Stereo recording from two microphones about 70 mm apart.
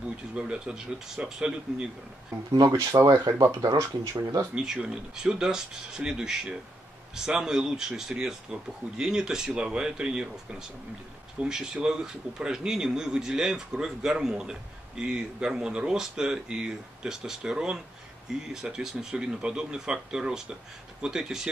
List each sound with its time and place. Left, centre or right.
0.3 s a man's voice: centre
2.5 s speech: right
2.8 s speech: right
3.1 s speech: right
4.6 s a man's voice: centre